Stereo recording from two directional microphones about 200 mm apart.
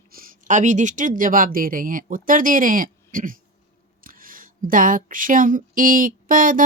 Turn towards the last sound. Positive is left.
turn(degrees=-40)  # may be behind; listen again after turning